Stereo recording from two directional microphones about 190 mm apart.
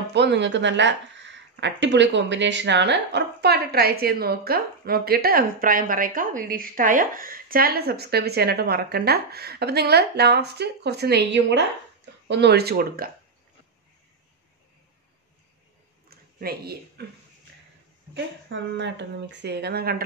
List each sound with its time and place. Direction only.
0.1 s speech: 65° right (ahead or behind)
16.1 s a sound: 55° right (ahead or behind)
18.1 s speech: 70° right (ahead or behind)